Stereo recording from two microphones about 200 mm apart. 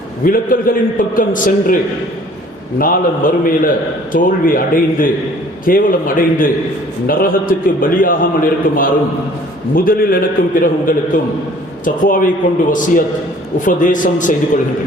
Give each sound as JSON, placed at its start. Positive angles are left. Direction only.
{"t": 0.3, "sound": "a man's voice", "side_deg": 45}
{"t": 2.7, "sound": "a man's voice", "side_deg": 45}
{"t": 13.7, "sound": "a man's voice", "side_deg": 40}